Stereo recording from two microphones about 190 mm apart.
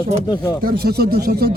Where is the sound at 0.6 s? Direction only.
55° right (ahead or behind).